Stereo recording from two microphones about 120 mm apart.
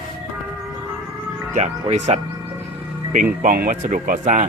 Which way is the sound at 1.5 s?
80° right.